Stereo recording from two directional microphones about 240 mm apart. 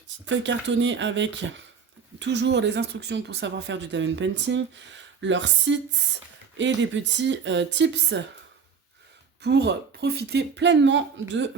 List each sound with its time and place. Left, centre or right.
0.3 s speech: right
9.4 s speech: right